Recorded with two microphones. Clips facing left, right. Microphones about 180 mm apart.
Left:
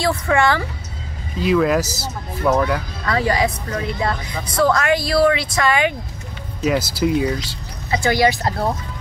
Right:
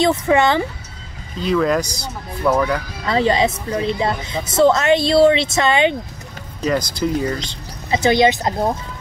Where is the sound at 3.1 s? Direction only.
25° right (ahead or behind).